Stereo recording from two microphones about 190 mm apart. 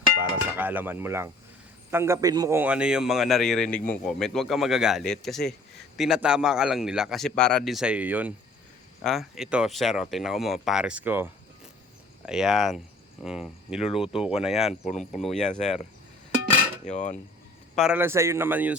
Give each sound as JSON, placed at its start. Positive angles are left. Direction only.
{"t": 0.2, "sound": "a man's voice", "side_deg": -10}
{"t": 14.7, "sound": "cutlery", "side_deg": 40}
{"t": 16.8, "sound": "cutlery", "side_deg": 40}
{"t": 17.7, "sound": "speech", "side_deg": -5}